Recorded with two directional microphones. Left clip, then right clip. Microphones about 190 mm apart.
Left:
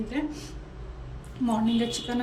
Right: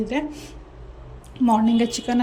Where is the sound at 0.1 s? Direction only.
30° right (ahead or behind).